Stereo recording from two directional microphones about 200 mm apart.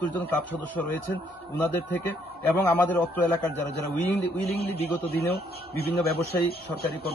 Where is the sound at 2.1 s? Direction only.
10° left (ahead or behind).